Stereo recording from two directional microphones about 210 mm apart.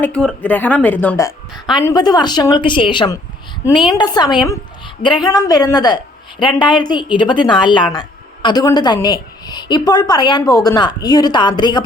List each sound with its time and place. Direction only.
0.0 s a woman's voice: 5° left (ahead or behind); by 11.8 s 20° left (ahead or behind)